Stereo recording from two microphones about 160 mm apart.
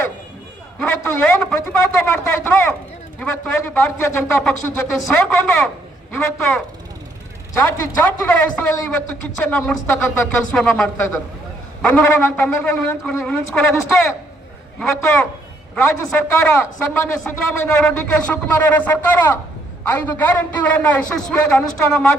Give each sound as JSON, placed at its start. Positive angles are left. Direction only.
{"t": 0.8, "sound": "a man's voice", "side_deg": 15}
{"t": 7.6, "sound": "a man's voice", "side_deg": 10}
{"t": 10.5, "sound": "a man's voice", "side_deg": 0}
{"t": 14.8, "sound": "a man's voice", "side_deg": 5}
{"t": 17.6, "sound": "a man's voice", "side_deg": 5}